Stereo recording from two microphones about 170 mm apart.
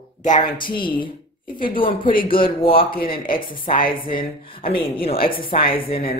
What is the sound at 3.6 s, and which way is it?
Speech, 55° left (ahead or behind).